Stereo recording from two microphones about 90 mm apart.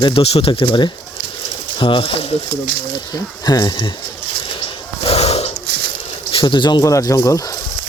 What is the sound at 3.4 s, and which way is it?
Speech, 50° left (ahead or behind).